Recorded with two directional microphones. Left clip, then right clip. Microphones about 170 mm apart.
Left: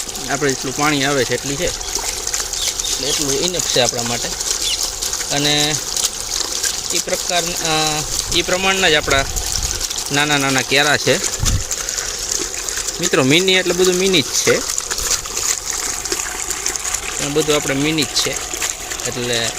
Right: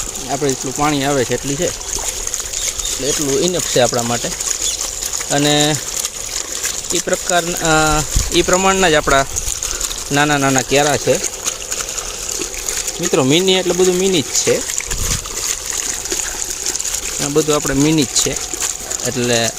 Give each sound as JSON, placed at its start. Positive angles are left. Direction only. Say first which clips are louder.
{"t": 0.3, "sound": "speech", "louder": "even", "side_deg": -10}
{"t": 3.0, "sound": "speech", "louder": "right 3 dB", "side_deg": -50}
{"t": 5.3, "sound": "speech", "louder": "right 3 dB", "side_deg": -50}
{"t": 7.3, "sound": "speech", "louder": "right 5 dB", "side_deg": -50}
{"t": 10.5, "sound": "speech", "louder": "right 1 dB", "side_deg": -30}
{"t": 10.8, "sound": "speech", "louder": "even", "side_deg": 0}
{"t": 13.0, "sound": "speech", "louder": "even", "side_deg": -15}
{"t": 17.3, "sound": "speech", "louder": "right 2 dB", "side_deg": -50}